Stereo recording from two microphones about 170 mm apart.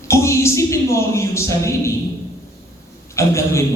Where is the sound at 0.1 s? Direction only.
15° left (ahead or behind).